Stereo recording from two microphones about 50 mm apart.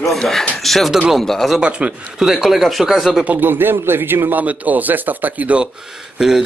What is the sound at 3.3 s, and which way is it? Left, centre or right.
A man's voice, right.